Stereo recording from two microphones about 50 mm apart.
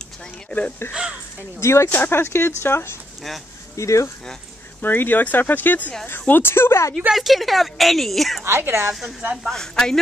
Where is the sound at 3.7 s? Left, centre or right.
Left.